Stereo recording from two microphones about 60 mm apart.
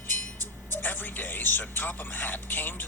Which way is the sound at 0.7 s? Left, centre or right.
Left.